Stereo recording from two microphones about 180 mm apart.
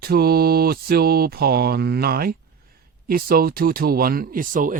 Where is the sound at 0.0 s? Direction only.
60° right (ahead or behind).